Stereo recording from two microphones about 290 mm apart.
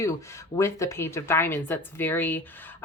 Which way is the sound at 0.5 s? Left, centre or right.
Centre.